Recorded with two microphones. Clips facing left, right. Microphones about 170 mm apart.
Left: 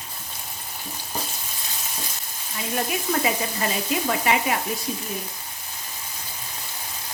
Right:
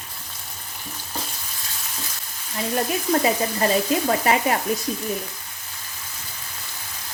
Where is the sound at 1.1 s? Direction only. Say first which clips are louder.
Left 1 dB; 15° left (ahead or behind).